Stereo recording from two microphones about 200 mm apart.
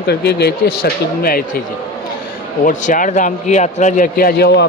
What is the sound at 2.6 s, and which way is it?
A man's voice, 40° left (ahead or behind).